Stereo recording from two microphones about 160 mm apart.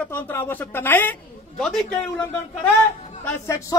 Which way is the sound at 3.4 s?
15° left (ahead or behind).